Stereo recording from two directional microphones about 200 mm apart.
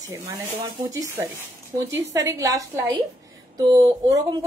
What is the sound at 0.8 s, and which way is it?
A woman's voice, 15° right (ahead or behind).